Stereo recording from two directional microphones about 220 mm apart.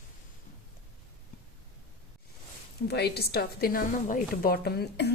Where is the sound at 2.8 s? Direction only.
50° left (ahead or behind).